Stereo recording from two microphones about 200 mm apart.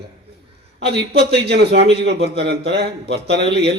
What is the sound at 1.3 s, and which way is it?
A man's voice, 55° right (ahead or behind).